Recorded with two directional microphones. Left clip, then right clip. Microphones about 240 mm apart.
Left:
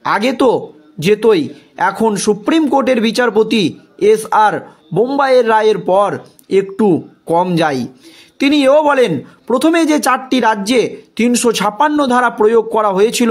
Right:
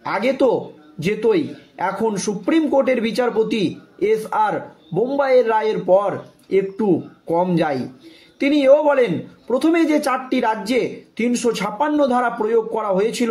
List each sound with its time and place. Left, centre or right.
0.0 s a man's voice: left